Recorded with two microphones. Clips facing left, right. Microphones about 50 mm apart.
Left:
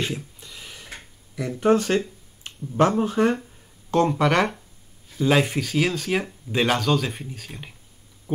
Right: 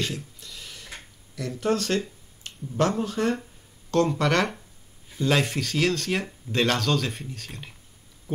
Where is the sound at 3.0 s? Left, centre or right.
Left.